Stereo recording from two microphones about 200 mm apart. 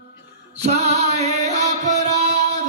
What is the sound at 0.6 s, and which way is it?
Music, 30° right (ahead or behind).